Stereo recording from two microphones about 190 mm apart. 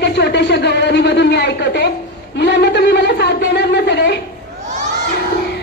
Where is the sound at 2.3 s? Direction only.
65° left (ahead or behind).